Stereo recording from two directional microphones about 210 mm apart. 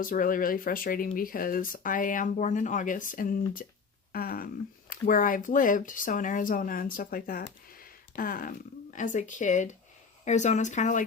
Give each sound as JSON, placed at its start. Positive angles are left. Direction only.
{"t": 0.0, "sound": "speech", "side_deg": 40}